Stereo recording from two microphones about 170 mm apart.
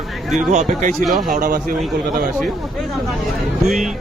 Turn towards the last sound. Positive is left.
turn(degrees=0)  # may be behind; listen again after turning